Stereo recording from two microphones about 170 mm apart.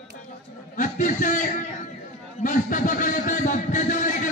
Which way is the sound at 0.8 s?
50° left (ahead or behind).